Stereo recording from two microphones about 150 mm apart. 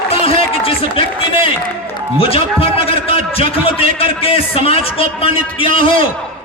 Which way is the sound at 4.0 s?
40° left (ahead or behind).